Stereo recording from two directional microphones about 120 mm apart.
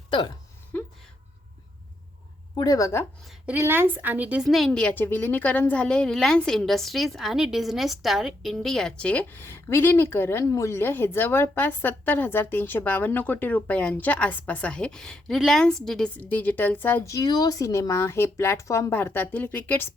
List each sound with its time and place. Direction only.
0.1 s speech: 40° left (ahead or behind)
2.6 s speech: 30° left (ahead or behind)
3.4 s a woman's voice: 15° right (ahead or behind)
4.4 s a woman's voice: centre (ahead or behind)
17.1 s speech: 30° left (ahead or behind)